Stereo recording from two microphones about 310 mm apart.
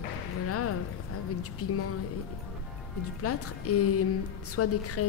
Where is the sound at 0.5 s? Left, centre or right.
Left.